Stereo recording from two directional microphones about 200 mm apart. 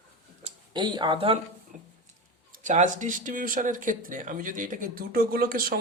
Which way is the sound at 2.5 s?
40° right (ahead or behind).